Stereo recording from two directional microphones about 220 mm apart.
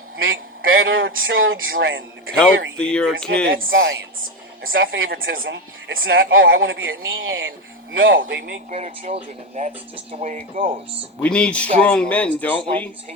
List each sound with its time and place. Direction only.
0.2 s speech: 65° right (ahead or behind)
2.7 s speech: 5° left (ahead or behind)
3.7 s a woman's voice: 60° right (ahead or behind)
8.2 s speech: 50° right (ahead or behind)
8.7 s speech: 30° right (ahead or behind)
11.2 s speech: 5° left (ahead or behind)